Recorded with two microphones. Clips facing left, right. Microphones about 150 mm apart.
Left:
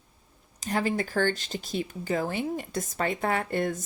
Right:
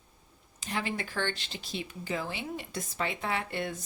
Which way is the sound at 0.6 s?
40° left (ahead or behind).